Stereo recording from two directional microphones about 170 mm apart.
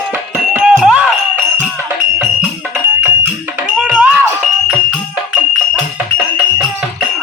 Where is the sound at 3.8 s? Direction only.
5° right (ahead or behind).